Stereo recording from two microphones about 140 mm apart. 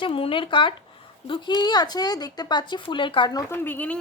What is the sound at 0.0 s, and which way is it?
Speech, 40° left (ahead or behind).